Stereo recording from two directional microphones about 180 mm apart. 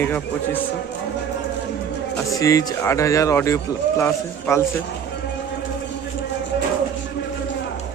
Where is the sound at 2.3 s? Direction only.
20° left (ahead or behind).